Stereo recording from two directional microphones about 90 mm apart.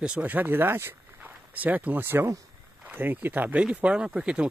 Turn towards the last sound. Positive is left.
turn(degrees=-10)  # may be behind; listen again after turning